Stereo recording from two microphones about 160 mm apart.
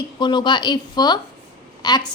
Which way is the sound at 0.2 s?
30° left (ahead or behind).